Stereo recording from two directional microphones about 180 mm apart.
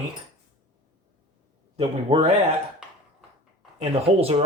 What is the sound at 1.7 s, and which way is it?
Speech, 35° right (ahead or behind).